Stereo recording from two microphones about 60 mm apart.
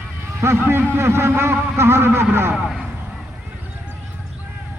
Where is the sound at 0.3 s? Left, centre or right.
Right.